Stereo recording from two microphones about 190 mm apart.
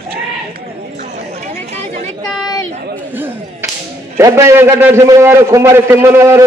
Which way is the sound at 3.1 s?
10° right (ahead or behind).